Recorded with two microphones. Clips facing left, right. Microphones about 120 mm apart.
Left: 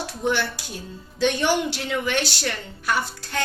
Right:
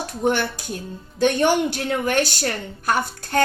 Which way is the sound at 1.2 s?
50° right (ahead or behind).